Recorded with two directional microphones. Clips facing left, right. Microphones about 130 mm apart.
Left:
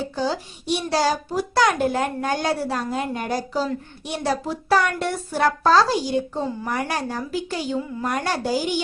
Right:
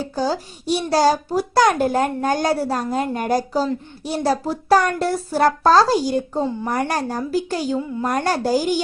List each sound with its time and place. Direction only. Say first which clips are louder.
0.2 s a child's voice: right 4 dB; 40° right (ahead or behind)